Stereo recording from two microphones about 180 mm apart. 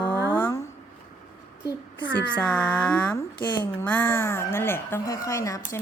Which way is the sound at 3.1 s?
25° left (ahead or behind).